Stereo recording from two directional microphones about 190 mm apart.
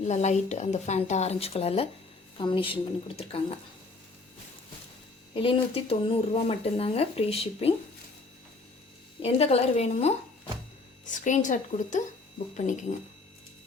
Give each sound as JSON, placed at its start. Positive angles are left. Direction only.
{"t": 0.0, "sound": "a woman's voice", "side_deg": 35}
{"t": 5.3, "sound": "speech", "side_deg": 30}
{"t": 9.2, "sound": "speech", "side_deg": 30}